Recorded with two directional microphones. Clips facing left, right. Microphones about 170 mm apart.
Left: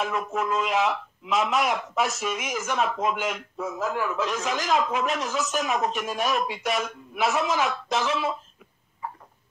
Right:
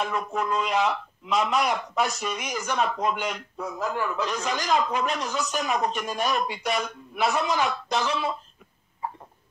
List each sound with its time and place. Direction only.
0.0 s a man's voice: centre (ahead or behind)